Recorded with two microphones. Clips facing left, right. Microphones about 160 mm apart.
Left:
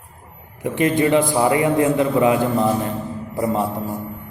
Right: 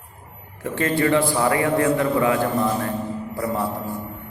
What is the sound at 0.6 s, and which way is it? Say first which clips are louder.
Mantra: left 3 dB; 20° left (ahead or behind).